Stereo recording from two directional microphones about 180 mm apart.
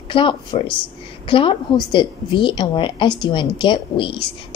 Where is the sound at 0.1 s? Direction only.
25° left (ahead or behind).